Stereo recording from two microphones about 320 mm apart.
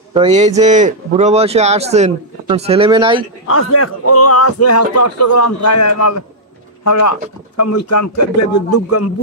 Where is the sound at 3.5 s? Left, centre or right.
Left.